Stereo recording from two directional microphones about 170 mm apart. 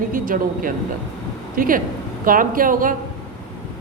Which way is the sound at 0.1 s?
55° right (ahead or behind).